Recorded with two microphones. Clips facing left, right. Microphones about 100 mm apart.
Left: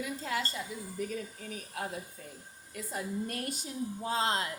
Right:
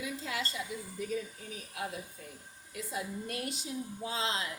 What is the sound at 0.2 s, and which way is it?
Speech, 40° left (ahead or behind).